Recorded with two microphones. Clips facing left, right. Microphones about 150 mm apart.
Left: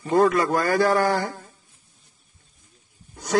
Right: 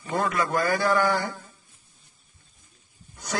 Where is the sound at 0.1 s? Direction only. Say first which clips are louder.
Left 7 dB; 45° left (ahead or behind).